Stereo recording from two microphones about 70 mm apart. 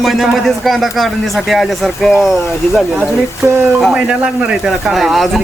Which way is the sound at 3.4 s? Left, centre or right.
Right.